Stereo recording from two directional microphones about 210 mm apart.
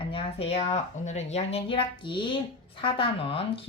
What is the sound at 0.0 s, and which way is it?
A woman's voice, 25° left (ahead or behind).